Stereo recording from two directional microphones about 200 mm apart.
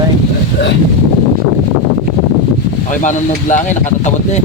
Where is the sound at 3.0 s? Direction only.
40° left (ahead or behind).